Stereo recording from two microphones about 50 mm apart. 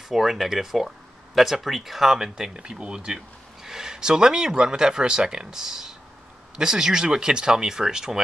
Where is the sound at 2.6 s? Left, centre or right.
Right.